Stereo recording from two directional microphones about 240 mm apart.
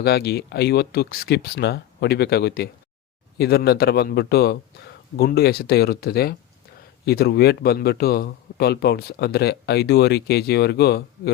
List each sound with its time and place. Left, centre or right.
0.0 s speech: left